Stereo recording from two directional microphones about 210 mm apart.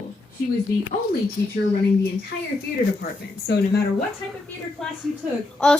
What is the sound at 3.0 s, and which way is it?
Speech, 50° left (ahead or behind).